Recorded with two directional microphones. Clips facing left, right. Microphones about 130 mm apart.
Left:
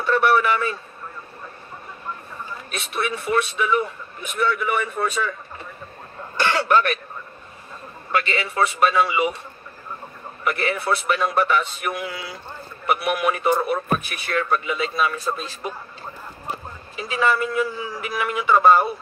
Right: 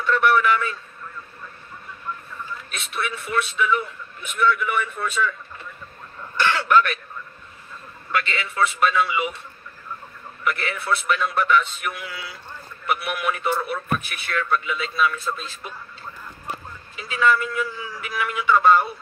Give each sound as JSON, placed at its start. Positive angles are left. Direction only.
{"t": 0.0, "sound": "radio", "side_deg": 35}
{"t": 2.3, "sound": "a man's voice", "side_deg": 35}
{"t": 8.1, "sound": "a man's voice", "side_deg": 35}
{"t": 10.4, "sound": "a man's voice", "side_deg": 40}
{"t": 17.0, "sound": "a man's voice", "side_deg": 35}